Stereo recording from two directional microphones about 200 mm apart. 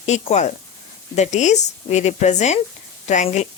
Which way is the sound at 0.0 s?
35° left (ahead or behind).